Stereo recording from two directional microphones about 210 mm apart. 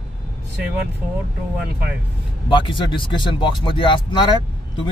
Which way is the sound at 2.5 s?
25° left (ahead or behind).